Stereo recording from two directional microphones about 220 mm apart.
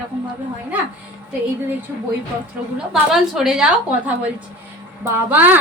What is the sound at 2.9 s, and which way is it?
Speech, centre (ahead or behind).